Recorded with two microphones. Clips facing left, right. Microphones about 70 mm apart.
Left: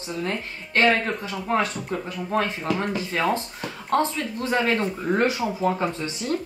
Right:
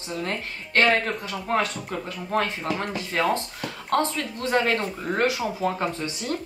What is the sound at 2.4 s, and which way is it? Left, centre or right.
Speech, left.